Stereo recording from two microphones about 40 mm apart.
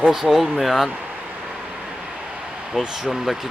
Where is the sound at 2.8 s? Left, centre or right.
Centre.